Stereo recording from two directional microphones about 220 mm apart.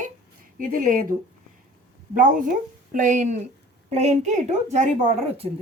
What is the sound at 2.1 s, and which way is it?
Speech, 40° right (ahead or behind).